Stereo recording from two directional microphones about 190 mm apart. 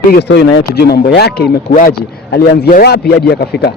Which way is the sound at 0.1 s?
60° left (ahead or behind).